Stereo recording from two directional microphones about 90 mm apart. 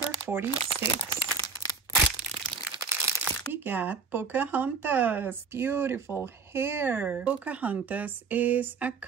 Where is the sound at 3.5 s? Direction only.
20° right (ahead or behind).